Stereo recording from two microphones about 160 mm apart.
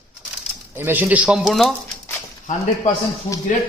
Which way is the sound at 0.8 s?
15° right (ahead or behind).